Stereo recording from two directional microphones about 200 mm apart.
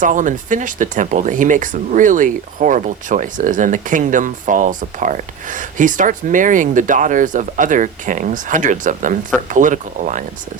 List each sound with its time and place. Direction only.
0.0 s speech: 40° right (ahead or behind)